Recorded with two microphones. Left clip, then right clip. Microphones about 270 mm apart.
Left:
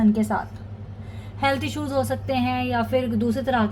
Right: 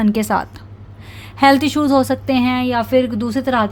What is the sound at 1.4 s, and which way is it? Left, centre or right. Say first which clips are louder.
A woman's voice: right 11 dB; right.